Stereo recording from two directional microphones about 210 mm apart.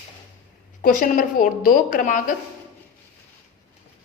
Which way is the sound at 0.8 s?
40° left (ahead or behind).